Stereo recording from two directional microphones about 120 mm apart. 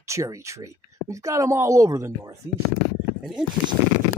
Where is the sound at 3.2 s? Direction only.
Centre (ahead or behind).